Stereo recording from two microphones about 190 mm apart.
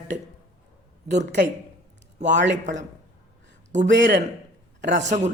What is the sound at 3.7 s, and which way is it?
Speech, 65° right (ahead or behind).